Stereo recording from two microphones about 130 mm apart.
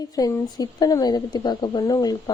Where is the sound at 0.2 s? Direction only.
30° left (ahead or behind).